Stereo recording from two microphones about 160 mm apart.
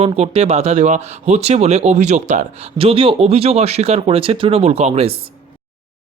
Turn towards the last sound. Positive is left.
turn(degrees=-40)  # may be behind; listen again after turning